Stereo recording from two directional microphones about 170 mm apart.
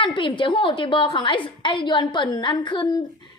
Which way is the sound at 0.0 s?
30° left (ahead or behind).